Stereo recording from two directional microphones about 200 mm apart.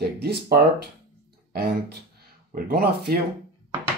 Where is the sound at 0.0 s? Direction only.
55° right (ahead or behind).